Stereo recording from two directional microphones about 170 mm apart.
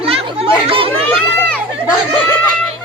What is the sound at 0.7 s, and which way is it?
Speech, 35° right (ahead or behind).